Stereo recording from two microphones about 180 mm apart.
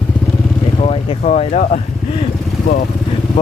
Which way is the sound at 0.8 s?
35° left (ahead or behind).